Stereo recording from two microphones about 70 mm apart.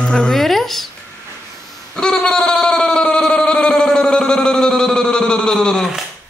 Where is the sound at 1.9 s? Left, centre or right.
Centre.